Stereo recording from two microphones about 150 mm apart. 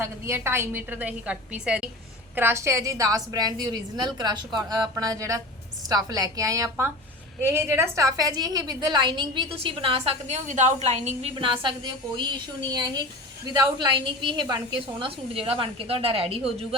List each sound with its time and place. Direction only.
0.0 s a woman's voice: 15° right (ahead or behind); by 16.6 s 40° right (ahead or behind)